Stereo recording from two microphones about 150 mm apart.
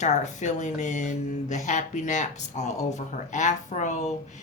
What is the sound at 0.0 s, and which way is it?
Speech, 55° left (ahead or behind).